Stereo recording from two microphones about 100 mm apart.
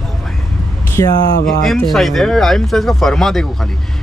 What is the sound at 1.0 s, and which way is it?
Speech, 40° left (ahead or behind).